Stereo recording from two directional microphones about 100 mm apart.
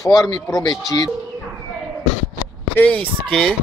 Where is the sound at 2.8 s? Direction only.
15° left (ahead or behind).